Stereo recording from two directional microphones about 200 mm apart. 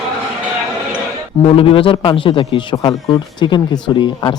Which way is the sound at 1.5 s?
25° left (ahead or behind).